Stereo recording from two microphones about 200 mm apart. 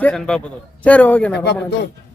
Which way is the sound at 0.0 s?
5° left (ahead or behind).